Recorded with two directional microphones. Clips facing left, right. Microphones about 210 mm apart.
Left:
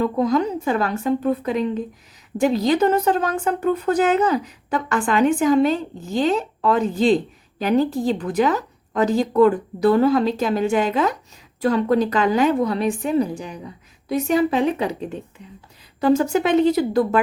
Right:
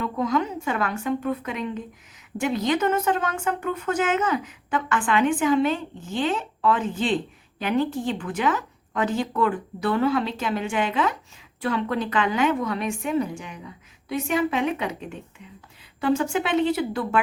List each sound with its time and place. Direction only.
0.0 s a woman's voice: 35° left (ahead or behind)